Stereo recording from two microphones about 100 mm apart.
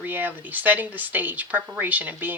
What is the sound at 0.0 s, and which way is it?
A woman's voice, 20° right (ahead or behind).